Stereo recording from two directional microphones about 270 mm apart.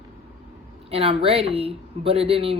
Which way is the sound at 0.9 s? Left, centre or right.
Right.